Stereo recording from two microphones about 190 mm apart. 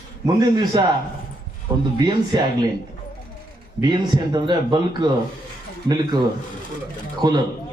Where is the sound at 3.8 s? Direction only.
20° right (ahead or behind).